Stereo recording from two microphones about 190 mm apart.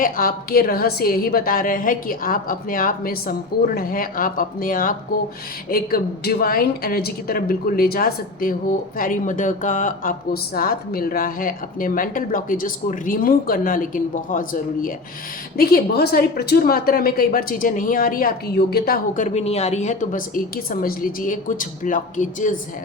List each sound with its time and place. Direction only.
0.0 s a woman's voice: 50° left (ahead or behind)